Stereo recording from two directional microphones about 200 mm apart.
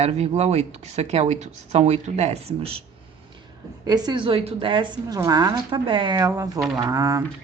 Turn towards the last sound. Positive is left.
turn(degrees=-15)  # may be behind; listen again after turning